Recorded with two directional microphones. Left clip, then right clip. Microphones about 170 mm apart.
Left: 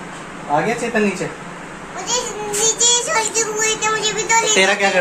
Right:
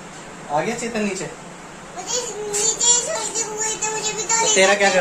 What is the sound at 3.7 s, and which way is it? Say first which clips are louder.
Music: left 6 dB; 25° right (ahead or behind).